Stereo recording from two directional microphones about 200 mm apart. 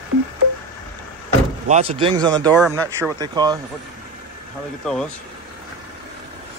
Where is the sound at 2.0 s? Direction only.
20° right (ahead or behind).